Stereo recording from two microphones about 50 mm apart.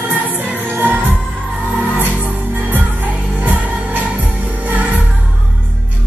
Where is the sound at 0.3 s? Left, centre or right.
Right.